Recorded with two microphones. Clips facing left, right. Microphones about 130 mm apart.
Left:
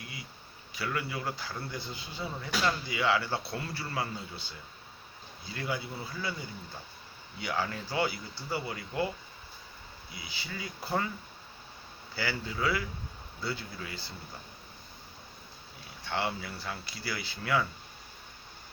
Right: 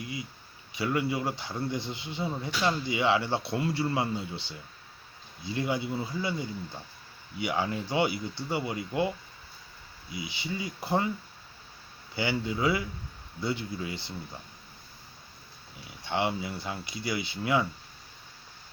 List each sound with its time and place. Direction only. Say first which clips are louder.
0.0 s a sound: right 8 dB; 20° right (ahead or behind)
0.7 s a man's voice: right 6 dB; 20° right (ahead or behind)
7.3 s a man's voice: right 4 dB; 20° right (ahead or behind)
12.1 s a man's voice: right 5 dB; 20° right (ahead or behind)
16.0 s a man's voice: right 4 dB; 20° right (ahead or behind)